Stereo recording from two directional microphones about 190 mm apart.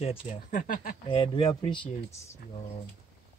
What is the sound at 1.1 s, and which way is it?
Speech, 25° left (ahead or behind).